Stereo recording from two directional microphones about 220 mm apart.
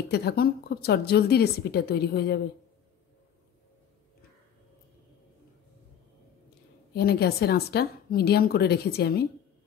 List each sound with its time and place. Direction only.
0.1 s a woman's voice: 45° left (ahead or behind)
6.9 s a woman's voice: 45° left (ahead or behind)